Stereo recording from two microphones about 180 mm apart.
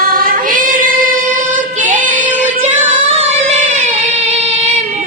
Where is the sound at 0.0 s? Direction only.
55° right (ahead or behind).